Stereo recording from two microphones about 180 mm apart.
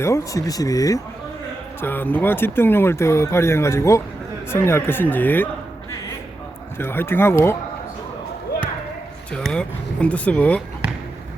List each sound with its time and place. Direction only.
0.0 s speech: 15° left (ahead or behind)
6.7 s speech: 15° left (ahead or behind)
9.3 s speech: 5° left (ahead or behind)